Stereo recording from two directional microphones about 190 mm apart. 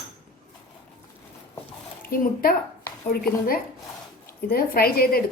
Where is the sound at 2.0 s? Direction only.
50° left (ahead or behind).